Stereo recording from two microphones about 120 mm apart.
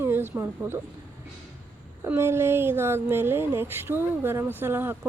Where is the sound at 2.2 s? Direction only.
20° right (ahead or behind).